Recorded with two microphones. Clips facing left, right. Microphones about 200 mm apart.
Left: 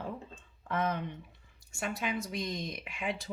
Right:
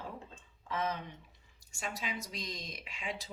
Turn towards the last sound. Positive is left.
turn(degrees=55)  # may be behind; listen again after turning